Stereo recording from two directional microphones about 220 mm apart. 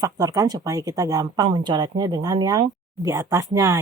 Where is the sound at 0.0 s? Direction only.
15° right (ahead or behind).